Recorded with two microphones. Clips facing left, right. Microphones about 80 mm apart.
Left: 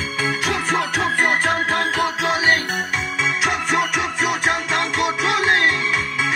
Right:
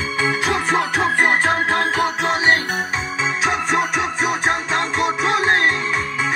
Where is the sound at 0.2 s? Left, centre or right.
Right.